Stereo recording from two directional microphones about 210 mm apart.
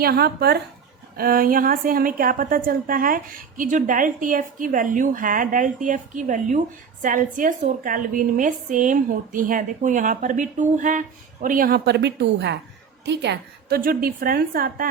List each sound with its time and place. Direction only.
0.0 s a woman's voice: 50° right (ahead or behind)